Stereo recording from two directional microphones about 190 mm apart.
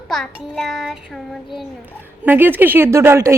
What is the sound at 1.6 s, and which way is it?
A woman's voice, 10° right (ahead or behind).